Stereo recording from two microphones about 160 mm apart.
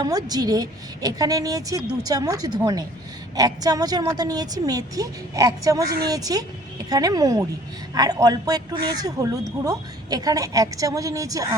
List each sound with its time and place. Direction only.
0.0 s speech: 25° right (ahead or behind)